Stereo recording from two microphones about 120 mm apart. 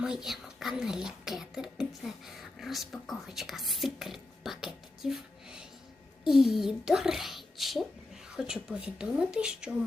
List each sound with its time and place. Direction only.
0.0 s speech: 5° right (ahead or behind)